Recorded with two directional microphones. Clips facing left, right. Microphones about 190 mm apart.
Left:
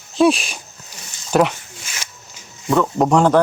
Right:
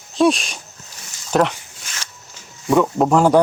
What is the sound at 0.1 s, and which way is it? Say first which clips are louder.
Speech: left 1 dB; 5° left (ahead or behind).